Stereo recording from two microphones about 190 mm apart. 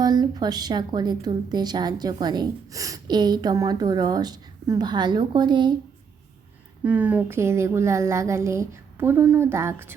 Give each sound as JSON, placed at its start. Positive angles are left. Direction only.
{"t": 0.0, "sound": "a woman's voice", "side_deg": -20}
{"t": 6.8, "sound": "a woman's voice", "side_deg": -10}